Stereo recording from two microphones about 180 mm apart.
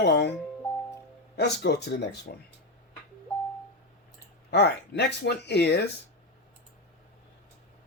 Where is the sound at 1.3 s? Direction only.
65° left (ahead or behind).